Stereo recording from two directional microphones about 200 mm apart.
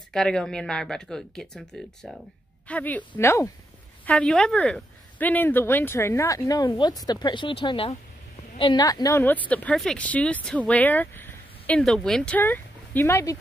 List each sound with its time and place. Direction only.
0.1 s speech: 5° left (ahead or behind)